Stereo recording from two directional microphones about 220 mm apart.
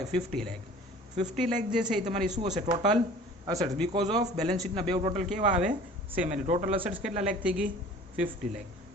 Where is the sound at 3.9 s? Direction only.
30° right (ahead or behind).